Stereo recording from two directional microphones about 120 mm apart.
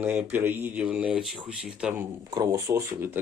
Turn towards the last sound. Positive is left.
turn(degrees=-20)  # may be behind; listen again after turning